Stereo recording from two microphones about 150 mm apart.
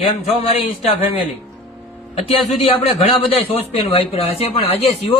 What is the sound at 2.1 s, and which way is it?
Speech, 40° left (ahead or behind).